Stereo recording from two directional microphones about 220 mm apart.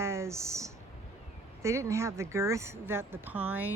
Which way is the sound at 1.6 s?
15° right (ahead or behind).